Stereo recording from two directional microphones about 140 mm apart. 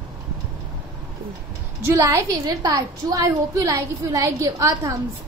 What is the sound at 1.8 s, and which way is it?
A woman's voice, 20° right (ahead or behind).